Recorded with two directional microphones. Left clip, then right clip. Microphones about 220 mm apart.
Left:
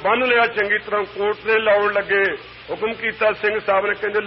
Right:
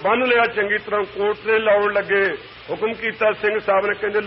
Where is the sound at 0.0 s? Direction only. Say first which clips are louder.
Even; 35° right (ahead or behind).